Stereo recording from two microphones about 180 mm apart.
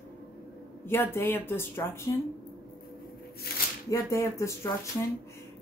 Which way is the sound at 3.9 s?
15° left (ahead or behind).